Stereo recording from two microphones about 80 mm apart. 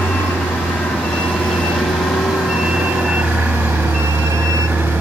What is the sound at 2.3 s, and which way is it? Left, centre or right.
Reversing beeps, centre.